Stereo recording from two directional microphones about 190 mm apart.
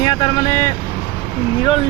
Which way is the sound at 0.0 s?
20° left (ahead or behind).